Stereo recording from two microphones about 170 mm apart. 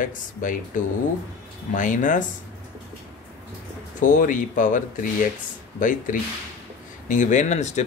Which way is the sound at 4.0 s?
50° left (ahead or behind).